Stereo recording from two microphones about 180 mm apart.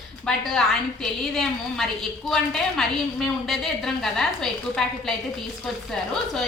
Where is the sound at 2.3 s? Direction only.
Centre (ahead or behind).